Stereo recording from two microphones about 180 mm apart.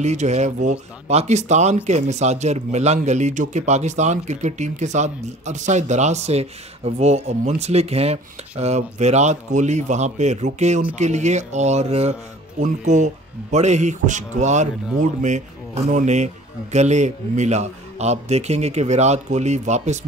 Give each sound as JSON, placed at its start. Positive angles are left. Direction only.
{"t": 0.0, "sound": "a man's voice", "side_deg": -40}